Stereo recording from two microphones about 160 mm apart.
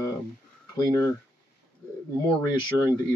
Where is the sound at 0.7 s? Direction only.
20° left (ahead or behind).